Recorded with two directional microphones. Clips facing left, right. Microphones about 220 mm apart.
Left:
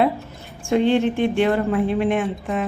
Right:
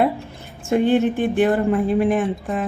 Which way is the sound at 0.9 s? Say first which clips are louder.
Right 1 dB; 5° right (ahead or behind).